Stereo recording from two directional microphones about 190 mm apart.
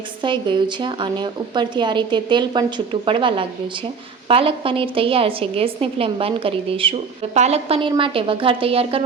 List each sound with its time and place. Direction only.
0.2 s a woman's voice: 25° right (ahead or behind)